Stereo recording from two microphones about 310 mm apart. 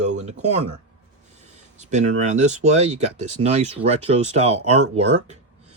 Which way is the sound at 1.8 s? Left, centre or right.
Right.